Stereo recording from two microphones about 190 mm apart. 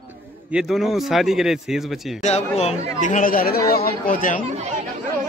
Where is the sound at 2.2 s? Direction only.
35° left (ahead or behind).